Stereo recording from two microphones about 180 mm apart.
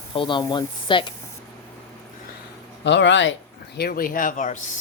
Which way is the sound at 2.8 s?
85° left.